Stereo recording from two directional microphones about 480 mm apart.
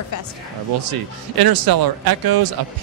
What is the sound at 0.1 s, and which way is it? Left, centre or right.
Speech, left.